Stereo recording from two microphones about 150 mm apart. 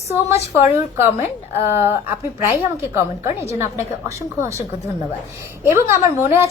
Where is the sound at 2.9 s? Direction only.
20° right (ahead or behind).